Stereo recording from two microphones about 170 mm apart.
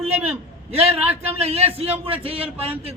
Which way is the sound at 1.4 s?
35° right (ahead or behind).